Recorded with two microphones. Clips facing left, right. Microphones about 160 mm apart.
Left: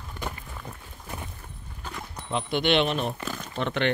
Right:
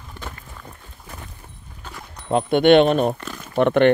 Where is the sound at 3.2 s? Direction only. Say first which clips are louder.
Even; centre (ahead or behind).